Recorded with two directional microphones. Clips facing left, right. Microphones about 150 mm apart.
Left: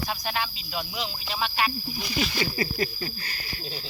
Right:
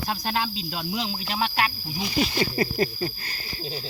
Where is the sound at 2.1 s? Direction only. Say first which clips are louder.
Right 4 dB; 35° right (ahead or behind).